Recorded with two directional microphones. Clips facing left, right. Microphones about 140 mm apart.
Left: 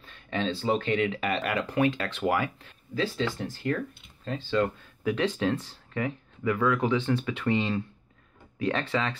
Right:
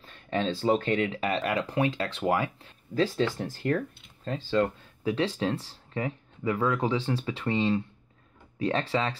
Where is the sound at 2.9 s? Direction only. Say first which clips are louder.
Right 3 dB; 45° right (ahead or behind).